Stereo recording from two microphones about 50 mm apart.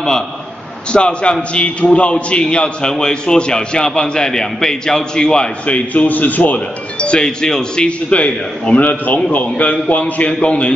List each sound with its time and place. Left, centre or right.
0.9 s a man's voice: centre
5.9 s speech: left